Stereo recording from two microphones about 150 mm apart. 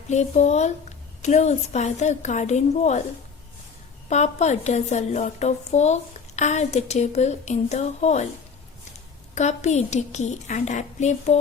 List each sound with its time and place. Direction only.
0.1 s a woman's voice: 50° left (ahead or behind)
4.1 s a woman's voice: 50° left (ahead or behind)
9.3 s a woman's voice: 50° left (ahead or behind)